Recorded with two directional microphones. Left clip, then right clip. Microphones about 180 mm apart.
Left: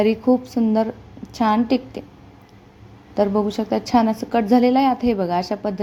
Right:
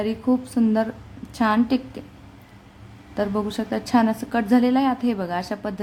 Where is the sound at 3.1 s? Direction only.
15° left (ahead or behind).